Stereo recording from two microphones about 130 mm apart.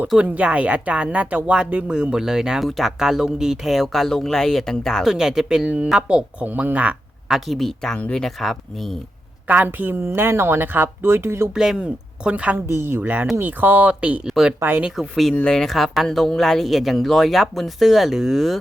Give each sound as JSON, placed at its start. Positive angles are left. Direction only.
{"t": 0.1, "sound": "speech", "side_deg": -10}
{"t": 9.5, "sound": "speech", "side_deg": -15}
{"t": 11.5, "sound": "speech", "side_deg": -5}